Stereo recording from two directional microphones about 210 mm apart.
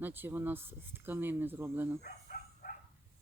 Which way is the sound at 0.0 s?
10° right (ahead or behind).